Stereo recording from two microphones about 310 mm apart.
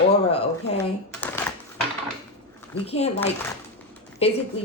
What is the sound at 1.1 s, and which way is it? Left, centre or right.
Typewriter, centre.